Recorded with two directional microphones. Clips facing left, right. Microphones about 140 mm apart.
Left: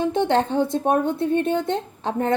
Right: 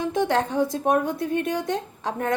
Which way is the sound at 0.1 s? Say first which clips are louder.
Left 3 dB; 25° left (ahead or behind).